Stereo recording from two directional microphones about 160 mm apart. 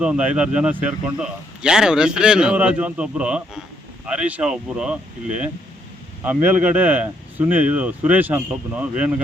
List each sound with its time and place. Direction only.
0.0 s speech: 5° right (ahead or behind)